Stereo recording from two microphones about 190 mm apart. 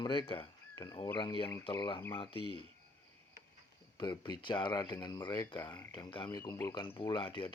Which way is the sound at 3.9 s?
25° left (ahead or behind).